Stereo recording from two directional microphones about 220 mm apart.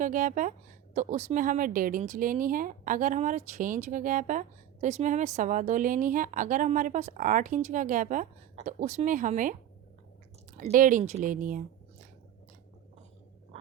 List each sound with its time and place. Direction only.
0.0 s speech: 35° right (ahead or behind)
10.6 s speech: 35° right (ahead or behind)